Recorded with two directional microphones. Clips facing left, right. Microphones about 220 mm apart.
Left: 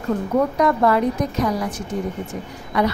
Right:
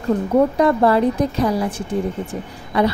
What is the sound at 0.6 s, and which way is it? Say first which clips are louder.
A woman's voice: right 3 dB; 30° right (ahead or behind).